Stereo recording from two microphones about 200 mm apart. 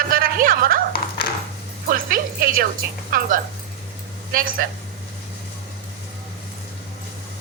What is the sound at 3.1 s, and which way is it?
A woman's voice, 40° right (ahead or behind).